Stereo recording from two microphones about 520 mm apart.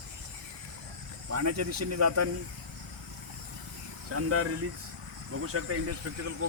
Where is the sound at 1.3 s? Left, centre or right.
Right.